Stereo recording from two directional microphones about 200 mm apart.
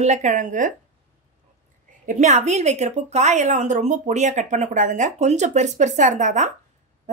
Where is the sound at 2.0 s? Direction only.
35° right (ahead or behind).